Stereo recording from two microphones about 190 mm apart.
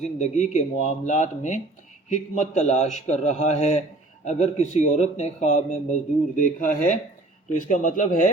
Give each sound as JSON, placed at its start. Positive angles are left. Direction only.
{"t": 0.0, "sound": "speech", "side_deg": 35}